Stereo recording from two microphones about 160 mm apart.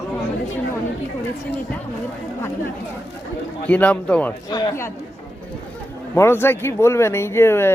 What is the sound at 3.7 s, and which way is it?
Speech, 10° left (ahead or behind).